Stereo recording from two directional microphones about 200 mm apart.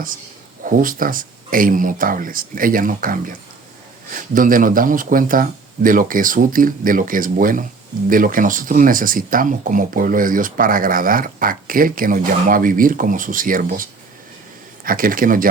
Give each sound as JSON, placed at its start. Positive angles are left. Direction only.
{"t": 0.6, "sound": "speech", "side_deg": -45}
{"t": 14.8, "sound": "speech", "side_deg": -45}